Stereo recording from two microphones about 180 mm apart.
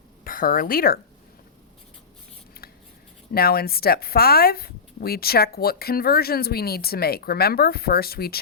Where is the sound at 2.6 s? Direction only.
55° left (ahead or behind).